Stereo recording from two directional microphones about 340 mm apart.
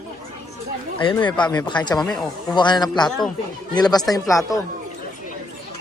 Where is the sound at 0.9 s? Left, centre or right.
Centre.